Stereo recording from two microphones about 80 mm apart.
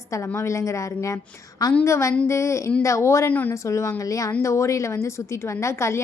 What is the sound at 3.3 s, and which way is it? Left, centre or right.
Speech, left.